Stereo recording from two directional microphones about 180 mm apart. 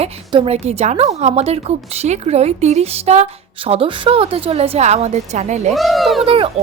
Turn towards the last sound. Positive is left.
turn(degrees=-30)  # may be behind; listen again after turning